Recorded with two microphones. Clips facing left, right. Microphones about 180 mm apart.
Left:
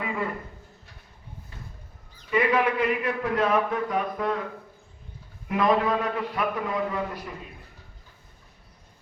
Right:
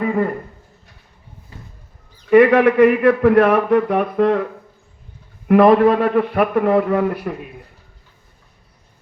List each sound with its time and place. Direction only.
0.0 s a sound: 45° right (ahead or behind)
2.3 s a man's voice: 70° right (ahead or behind)
5.5 s a man's voice: 65° right (ahead or behind)